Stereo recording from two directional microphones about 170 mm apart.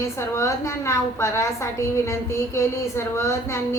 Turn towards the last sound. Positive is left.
turn(degrees=15)  # may be behind; listen again after turning